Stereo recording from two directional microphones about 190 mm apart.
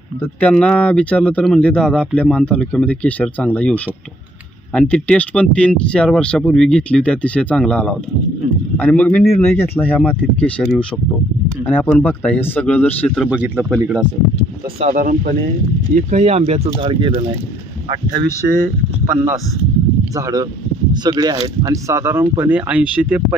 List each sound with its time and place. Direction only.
0.4 s speech: 5° left (ahead or behind)
13.3 s speech: 10° right (ahead or behind)
14.8 s speech: 40° right (ahead or behind)
20.2 s speech: 15° right (ahead or behind)